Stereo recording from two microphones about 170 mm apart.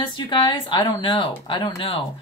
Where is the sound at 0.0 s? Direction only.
25° left (ahead or behind).